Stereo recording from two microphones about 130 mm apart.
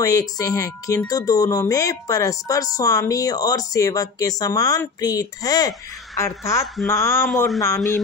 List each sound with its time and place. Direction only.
0.0 s speech: 25° left (ahead or behind)
7.2 s a man's voice: centre (ahead or behind)